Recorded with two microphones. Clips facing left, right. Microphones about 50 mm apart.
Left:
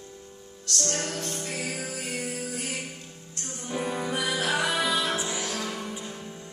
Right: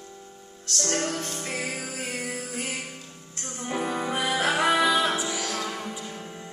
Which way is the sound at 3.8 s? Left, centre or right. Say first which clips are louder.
Right 1 dB; right.